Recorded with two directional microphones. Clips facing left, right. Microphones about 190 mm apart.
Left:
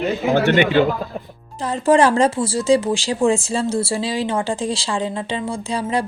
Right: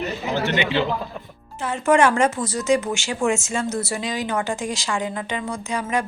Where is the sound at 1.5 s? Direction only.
35° left (ahead or behind).